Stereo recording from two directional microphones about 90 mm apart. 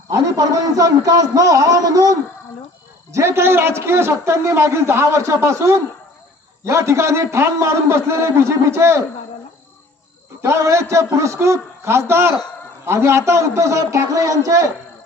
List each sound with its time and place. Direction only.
0.1 s a man's voice: 40° right (ahead or behind)
3.1 s a man's voice: 30° right (ahead or behind)
10.4 s a man's voice: 35° right (ahead or behind)